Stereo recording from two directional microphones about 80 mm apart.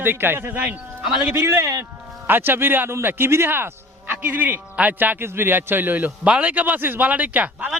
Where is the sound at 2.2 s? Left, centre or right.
Right.